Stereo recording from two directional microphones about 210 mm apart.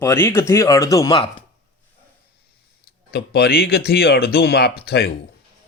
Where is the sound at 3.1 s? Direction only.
50° left (ahead or behind).